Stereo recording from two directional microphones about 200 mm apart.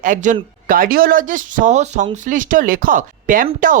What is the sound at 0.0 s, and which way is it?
Speech, 40° right (ahead or behind).